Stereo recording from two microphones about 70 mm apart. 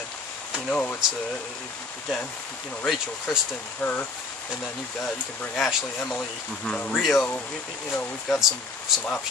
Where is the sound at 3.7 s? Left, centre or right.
Left.